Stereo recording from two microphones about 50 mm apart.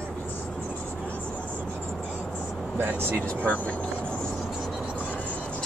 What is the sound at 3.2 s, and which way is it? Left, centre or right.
Speech, left.